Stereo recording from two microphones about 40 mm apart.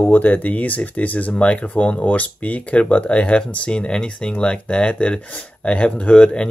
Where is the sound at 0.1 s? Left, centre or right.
Left.